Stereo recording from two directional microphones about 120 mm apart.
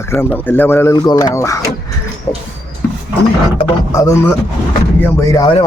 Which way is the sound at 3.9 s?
25° left (ahead or behind).